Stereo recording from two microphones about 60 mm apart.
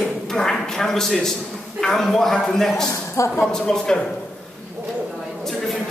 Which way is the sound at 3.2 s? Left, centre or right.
Left.